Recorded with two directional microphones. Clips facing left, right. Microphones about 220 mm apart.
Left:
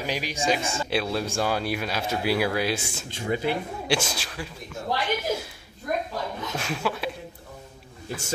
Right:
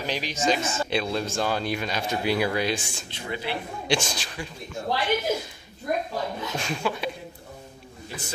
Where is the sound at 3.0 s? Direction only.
45° left (ahead or behind).